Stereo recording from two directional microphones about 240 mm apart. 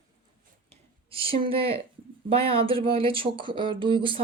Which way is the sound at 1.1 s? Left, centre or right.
Right.